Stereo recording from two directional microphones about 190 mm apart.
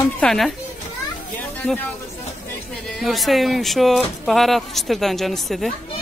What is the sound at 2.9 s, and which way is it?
Speech, centre (ahead or behind).